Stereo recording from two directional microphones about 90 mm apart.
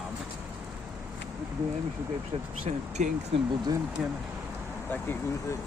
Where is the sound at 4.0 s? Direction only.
5° right (ahead or behind).